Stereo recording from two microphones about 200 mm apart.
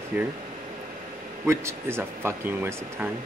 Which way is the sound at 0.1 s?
10° right (ahead or behind).